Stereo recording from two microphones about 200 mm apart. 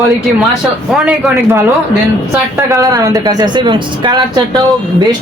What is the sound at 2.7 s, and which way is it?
Speech, 15° right (ahead or behind).